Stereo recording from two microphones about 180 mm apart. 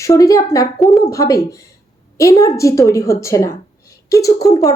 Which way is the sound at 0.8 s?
Centre (ahead or behind).